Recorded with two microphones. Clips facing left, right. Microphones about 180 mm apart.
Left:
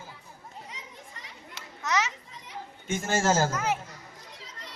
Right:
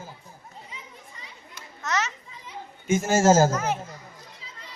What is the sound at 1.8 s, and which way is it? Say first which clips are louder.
Children playing: even; 10° left (ahead or behind).